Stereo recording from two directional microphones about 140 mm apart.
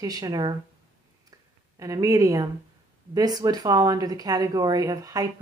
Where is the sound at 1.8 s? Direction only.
25° right (ahead or behind).